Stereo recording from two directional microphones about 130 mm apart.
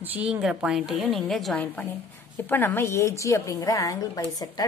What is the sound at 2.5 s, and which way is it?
A woman's voice, 15° left (ahead or behind).